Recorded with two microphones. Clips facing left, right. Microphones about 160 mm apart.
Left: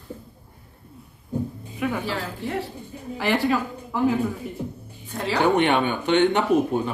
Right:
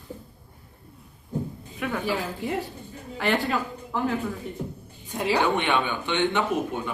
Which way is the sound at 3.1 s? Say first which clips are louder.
Left 3 dB; centre (ahead or behind).